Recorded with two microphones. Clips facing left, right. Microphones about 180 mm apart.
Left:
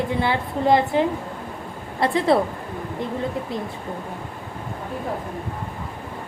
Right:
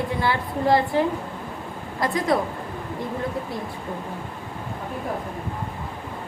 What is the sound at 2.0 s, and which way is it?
Speech, 30° left (ahead or behind).